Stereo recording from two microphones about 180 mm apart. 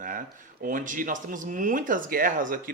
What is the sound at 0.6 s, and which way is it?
A man's voice, 50° right (ahead or behind).